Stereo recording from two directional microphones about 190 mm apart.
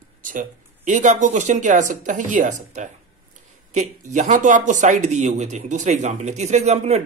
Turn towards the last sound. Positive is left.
turn(degrees=-35)  # may be behind; listen again after turning